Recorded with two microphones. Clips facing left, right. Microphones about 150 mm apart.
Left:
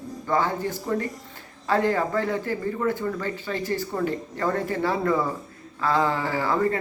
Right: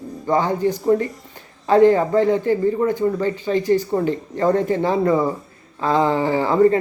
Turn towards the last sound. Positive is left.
turn(degrees=-20)  # may be behind; listen again after turning